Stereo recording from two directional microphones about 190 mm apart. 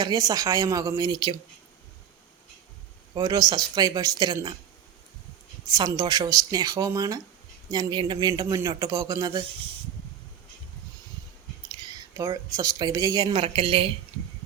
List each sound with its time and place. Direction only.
0.0 s speech: 20° right (ahead or behind)
3.2 s speech: 20° right (ahead or behind)
5.6 s speech: 20° right (ahead or behind)
11.7 s speech: 20° right (ahead or behind)